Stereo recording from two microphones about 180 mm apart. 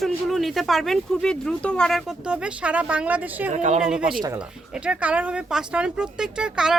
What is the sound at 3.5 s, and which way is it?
Speech, 40° right (ahead or behind).